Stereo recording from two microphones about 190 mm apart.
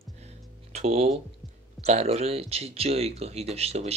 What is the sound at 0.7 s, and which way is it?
Speech, 35° right (ahead or behind).